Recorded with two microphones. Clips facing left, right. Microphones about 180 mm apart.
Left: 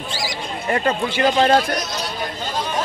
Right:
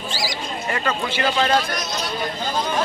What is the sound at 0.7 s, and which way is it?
Speech, 40° left (ahead or behind).